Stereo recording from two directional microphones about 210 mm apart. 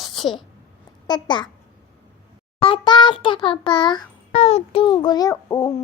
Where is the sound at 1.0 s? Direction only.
20° left (ahead or behind).